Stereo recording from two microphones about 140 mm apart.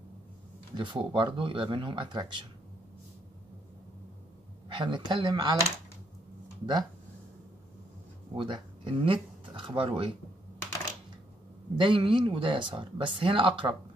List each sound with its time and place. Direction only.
0.7 s speech: 35° right (ahead or behind)
4.7 s speech: 35° right (ahead or behind)
6.6 s speech: 30° right (ahead or behind)
8.4 s speech: 35° right (ahead or behind)
11.7 s speech: 35° right (ahead or behind)